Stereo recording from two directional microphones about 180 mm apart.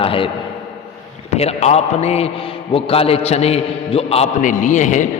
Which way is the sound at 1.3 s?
35° left (ahead or behind).